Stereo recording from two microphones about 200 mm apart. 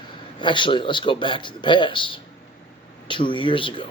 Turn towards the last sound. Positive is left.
turn(degrees=25)  # may be behind; listen again after turning